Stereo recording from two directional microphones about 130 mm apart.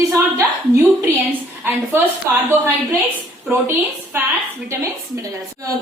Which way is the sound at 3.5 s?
15° right (ahead or behind).